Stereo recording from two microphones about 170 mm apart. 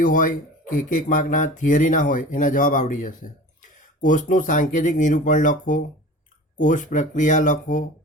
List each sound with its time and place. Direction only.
0.0 s speech: 50° left (ahead or behind)